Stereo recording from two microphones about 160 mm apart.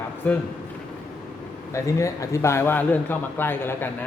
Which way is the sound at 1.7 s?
20° left (ahead or behind).